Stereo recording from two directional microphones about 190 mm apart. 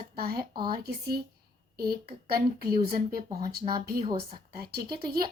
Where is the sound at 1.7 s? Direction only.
55° right (ahead or behind).